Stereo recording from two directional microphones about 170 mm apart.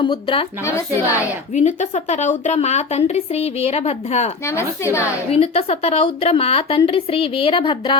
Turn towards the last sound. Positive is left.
turn(degrees=30)  # may be behind; listen again after turning